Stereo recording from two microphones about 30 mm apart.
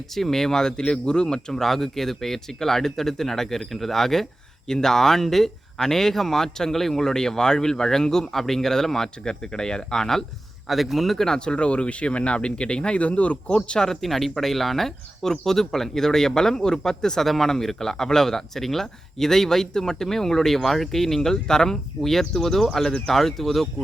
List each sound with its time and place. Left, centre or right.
0.1 s speech: centre
1.5 s speech: centre
9.2 s speech: left
10.7 s speech: centre
11.3 s speech: left
13.0 s speech: left
13.7 s speech: centre
14.0 s speech: centre; by 17.2 s left
17.2 s speech: centre